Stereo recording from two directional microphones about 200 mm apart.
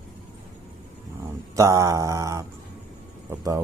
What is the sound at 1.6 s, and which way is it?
Mantra, 15° right (ahead or behind).